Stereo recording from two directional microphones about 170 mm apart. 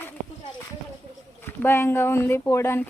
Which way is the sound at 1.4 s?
15° left (ahead or behind).